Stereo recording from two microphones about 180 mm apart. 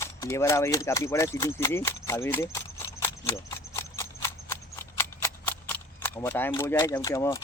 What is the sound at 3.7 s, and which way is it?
Horse, 15° left (ahead or behind).